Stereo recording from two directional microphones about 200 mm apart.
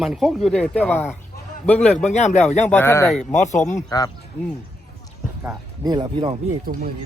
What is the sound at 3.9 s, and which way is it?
Speech, 20° left (ahead or behind).